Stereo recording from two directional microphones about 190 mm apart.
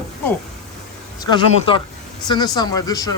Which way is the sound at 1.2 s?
25° left (ahead or behind).